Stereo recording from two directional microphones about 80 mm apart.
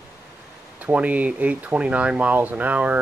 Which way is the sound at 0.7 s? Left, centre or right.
Centre.